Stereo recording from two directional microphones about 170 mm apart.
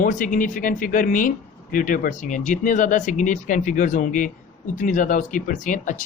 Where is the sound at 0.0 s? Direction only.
50° left (ahead or behind).